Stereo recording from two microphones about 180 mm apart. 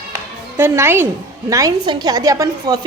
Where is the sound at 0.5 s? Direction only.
15° right (ahead or behind).